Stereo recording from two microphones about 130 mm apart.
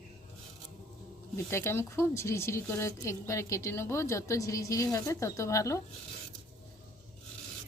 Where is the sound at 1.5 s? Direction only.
20° left (ahead or behind).